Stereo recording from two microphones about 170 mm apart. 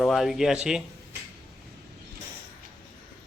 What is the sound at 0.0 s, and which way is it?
Speech, centre (ahead or behind).